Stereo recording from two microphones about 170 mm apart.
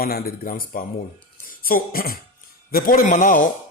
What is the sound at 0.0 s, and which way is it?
Speech, 60° left (ahead or behind).